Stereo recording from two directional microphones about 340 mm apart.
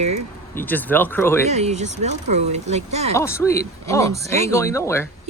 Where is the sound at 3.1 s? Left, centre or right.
Centre.